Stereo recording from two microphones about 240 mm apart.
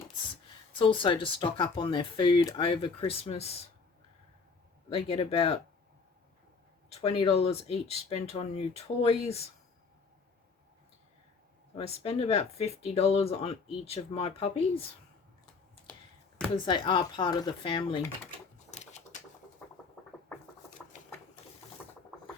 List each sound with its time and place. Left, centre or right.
0.7 s speech: left
4.9 s speech: left
7.0 s speech: left
11.8 s speech: left
16.6 s speech: centre
18.7 s a sound: left